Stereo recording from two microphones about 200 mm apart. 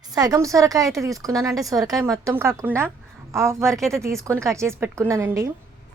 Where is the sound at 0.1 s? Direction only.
20° right (ahead or behind).